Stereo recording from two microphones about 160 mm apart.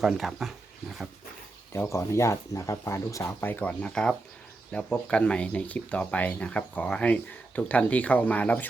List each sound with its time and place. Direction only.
0.0 s speech: centre (ahead or behind)
1.7 s speech: 15° left (ahead or behind)